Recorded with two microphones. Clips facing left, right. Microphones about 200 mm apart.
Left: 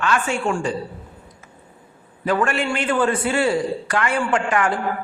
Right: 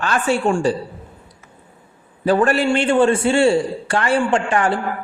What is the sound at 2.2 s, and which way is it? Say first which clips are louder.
A man's voice: right 5 dB; 35° right (ahead or behind).